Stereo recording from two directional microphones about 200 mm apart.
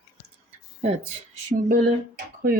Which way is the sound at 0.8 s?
30° right (ahead or behind).